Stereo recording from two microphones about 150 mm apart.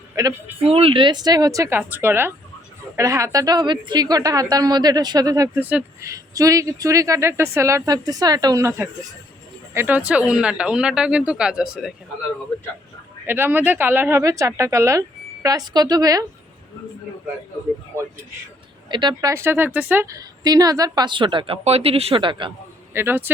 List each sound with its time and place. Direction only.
0.2 s speech: 20° right (ahead or behind)
0.6 s a woman's voice: 40° right (ahead or behind); by 11.9 s 5° right (ahead or behind)
13.2 s a woman's voice: 15° right (ahead or behind)
18.9 s speech: 30° right (ahead or behind)
19.3 s a woman's voice: 15° right (ahead or behind); by 22.5 s 35° right (ahead or behind)
23.0 s speech: 15° right (ahead or behind)